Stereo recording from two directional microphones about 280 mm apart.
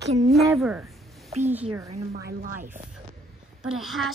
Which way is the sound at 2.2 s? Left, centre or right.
Right.